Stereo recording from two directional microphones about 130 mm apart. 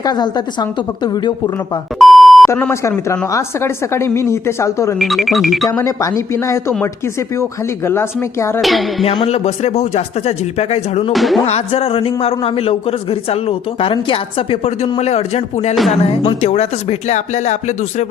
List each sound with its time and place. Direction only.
0.0 s a woman's voice: 30° left (ahead or behind)
2.0 s beep: centre (ahead or behind)
2.8 s a woman's voice: 25° left (ahead or behind)
4.9 s speech: centre (ahead or behind)
5.7 s a woman's voice: 25° left (ahead or behind)
7.9 s a woman's voice: 20° left (ahead or behind)
8.6 s speech: centre (ahead or behind)
9.0 s speech: 50° left (ahead or behind)
11.1 s speech: centre (ahead or behind)
11.4 s a man's voice: 50° left (ahead or behind)